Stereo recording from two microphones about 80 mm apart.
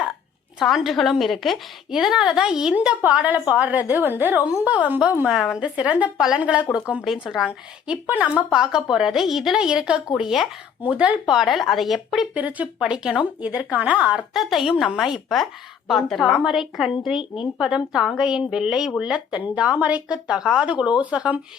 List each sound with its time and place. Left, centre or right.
0.6 s a woman's voice: centre
5.3 s a woman's voice: centre
8.0 s a woman's voice: right
8.4 s a woman's voice: centre
10.8 s speech: centre
12.3 s a woman's voice: centre
14.3 s a woman's voice: centre